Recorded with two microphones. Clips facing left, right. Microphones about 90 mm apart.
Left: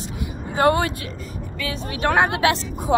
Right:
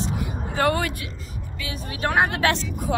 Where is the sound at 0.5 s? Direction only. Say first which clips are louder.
Left 4 dB; 25° left (ahead or behind).